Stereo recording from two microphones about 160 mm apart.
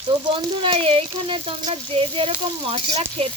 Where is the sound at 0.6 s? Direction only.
35° right (ahead or behind).